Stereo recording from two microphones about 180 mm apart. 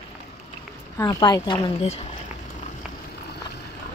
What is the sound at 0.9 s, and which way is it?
Speech, 20° left (ahead or behind).